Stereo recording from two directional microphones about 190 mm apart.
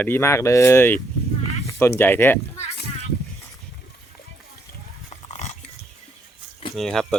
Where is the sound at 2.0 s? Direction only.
10° left (ahead or behind).